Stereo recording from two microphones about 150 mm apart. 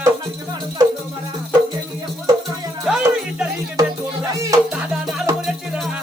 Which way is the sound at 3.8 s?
25° right (ahead or behind).